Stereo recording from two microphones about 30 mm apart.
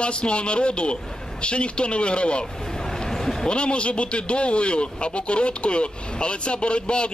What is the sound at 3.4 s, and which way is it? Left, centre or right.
Speech, left.